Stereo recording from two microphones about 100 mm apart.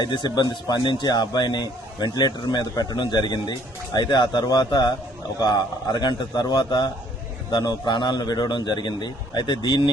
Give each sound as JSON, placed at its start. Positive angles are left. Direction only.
{"t": 0.0, "sound": "speech", "side_deg": 50}